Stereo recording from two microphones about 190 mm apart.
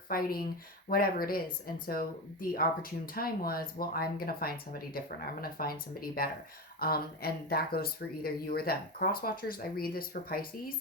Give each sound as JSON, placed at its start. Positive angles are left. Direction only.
{"t": 0.1, "sound": "speech", "side_deg": 50}